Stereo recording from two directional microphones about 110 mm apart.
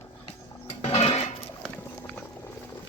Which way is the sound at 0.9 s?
80° left.